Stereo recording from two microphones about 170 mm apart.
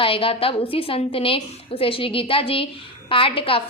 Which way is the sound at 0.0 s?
30° left (ahead or behind).